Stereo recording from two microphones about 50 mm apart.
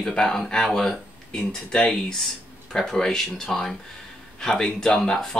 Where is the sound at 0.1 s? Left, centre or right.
Centre.